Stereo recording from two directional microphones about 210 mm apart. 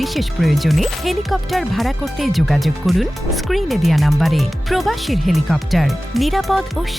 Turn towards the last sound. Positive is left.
turn(degrees=0)  # may be behind; listen again after turning